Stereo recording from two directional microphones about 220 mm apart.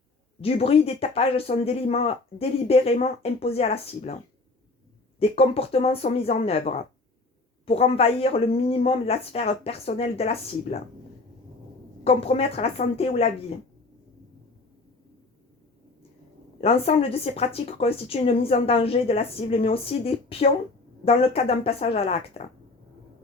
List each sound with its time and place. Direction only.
0.4 s speech: 25° left (ahead or behind)
5.2 s speech: 25° left (ahead or behind)
12.0 s speech: 25° left (ahead or behind)
16.6 s speech: 25° left (ahead or behind)